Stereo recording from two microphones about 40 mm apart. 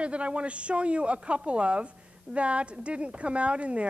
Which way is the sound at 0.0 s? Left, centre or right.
Right.